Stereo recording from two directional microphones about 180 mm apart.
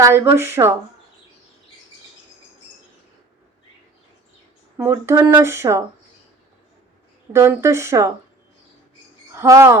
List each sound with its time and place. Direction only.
0.0 s speech: 15° right (ahead or behind)
4.8 s speech: 15° right (ahead or behind)
7.3 s speech: 15° right (ahead or behind)
9.3 s speech: 15° right (ahead or behind)